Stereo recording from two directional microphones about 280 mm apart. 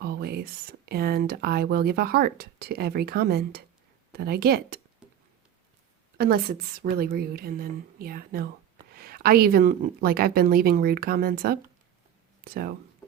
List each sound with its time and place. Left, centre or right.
0.0 s speech: right
6.1 s speech: right